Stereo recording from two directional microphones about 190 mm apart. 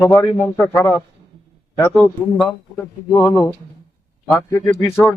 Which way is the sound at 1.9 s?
5° left (ahead or behind).